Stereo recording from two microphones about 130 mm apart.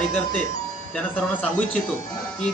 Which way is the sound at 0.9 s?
10° left (ahead or behind).